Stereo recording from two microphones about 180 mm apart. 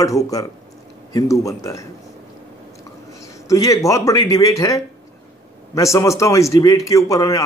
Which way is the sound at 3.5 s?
15° left (ahead or behind).